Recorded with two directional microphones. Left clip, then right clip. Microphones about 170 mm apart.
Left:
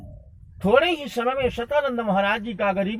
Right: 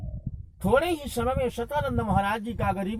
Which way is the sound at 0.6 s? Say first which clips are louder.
Left 5 dB; 30° right (ahead or behind).